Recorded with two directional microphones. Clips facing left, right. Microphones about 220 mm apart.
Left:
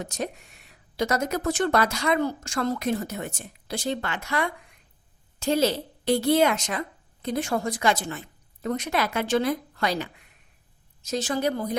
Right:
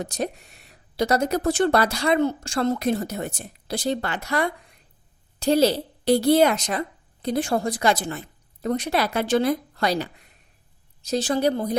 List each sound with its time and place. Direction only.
0.0 s speech: 35° right (ahead or behind)